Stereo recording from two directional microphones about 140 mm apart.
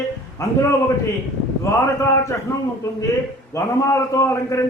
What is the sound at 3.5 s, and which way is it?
A man's voice, 20° left (ahead or behind).